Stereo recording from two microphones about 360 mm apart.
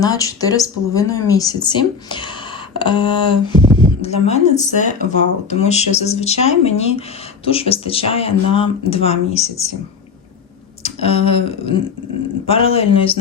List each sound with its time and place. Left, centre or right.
0.0 s speech: centre
10.8 s speech: centre